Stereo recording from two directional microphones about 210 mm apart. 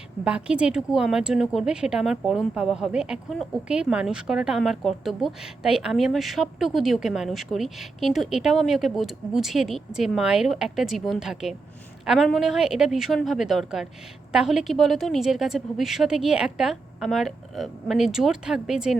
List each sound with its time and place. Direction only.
0.3 s speech: 5° right (ahead or behind)